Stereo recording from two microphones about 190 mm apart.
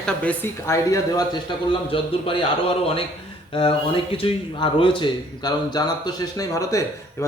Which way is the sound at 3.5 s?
30° left (ahead or behind).